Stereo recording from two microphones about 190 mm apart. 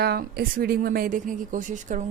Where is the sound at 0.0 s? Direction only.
55° right (ahead or behind).